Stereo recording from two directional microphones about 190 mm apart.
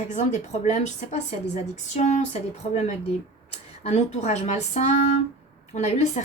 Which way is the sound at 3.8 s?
35° left (ahead or behind).